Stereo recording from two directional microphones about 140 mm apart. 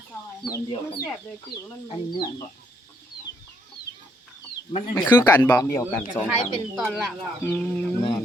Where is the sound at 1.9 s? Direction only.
30° left (ahead or behind).